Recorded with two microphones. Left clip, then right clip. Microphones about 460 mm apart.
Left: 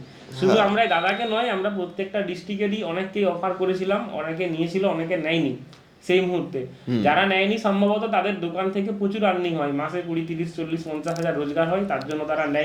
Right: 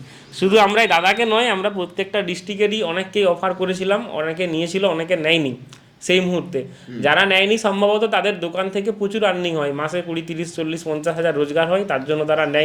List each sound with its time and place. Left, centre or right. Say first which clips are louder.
0.3 s speech: right 5 dB; right